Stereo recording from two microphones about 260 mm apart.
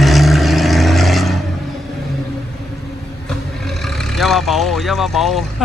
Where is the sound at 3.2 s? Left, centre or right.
Centre.